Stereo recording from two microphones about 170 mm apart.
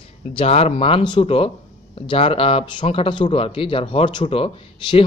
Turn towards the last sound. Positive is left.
turn(degrees=35)  # may be behind; listen again after turning